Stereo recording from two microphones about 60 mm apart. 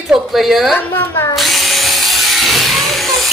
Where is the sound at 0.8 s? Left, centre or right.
Left.